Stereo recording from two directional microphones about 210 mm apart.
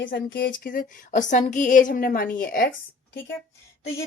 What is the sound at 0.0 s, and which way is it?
Speech, 50° left (ahead or behind).